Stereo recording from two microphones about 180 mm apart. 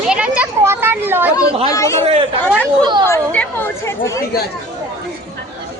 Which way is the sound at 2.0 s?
35° right (ahead or behind).